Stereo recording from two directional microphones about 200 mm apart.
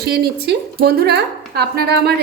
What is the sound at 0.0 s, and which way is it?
A woman's voice, 55° right (ahead or behind).